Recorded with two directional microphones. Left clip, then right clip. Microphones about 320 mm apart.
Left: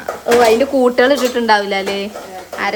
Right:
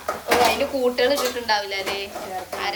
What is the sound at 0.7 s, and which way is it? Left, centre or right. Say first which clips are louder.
Speech: left 8 dB; left.